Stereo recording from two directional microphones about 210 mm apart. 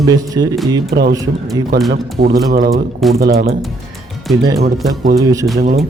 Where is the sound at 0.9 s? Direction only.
55° right (ahead or behind).